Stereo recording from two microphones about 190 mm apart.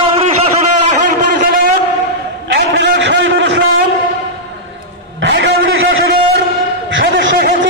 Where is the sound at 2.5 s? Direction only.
65° right (ahead or behind).